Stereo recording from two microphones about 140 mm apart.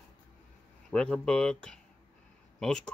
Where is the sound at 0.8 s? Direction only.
5° left (ahead or behind).